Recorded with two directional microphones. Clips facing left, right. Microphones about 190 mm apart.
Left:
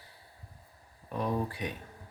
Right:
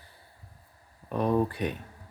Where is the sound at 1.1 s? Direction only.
60° right (ahead or behind).